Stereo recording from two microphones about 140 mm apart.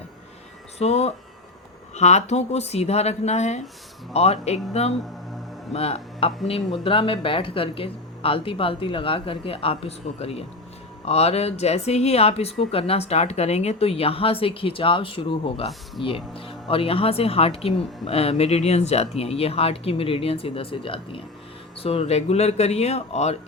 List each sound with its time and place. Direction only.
0.8 s speech: 50° left (ahead or behind)